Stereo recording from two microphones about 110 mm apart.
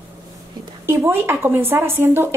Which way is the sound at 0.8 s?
20° right (ahead or behind).